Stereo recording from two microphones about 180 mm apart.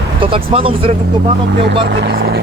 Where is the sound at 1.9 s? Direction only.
65° right (ahead or behind).